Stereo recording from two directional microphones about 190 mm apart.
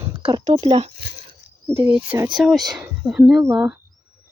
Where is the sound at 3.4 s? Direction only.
15° right (ahead or behind).